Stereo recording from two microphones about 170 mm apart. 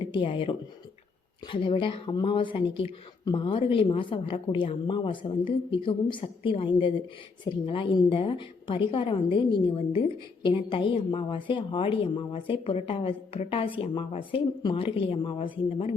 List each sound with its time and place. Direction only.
0.1 s a woman's voice: 30° left (ahead or behind)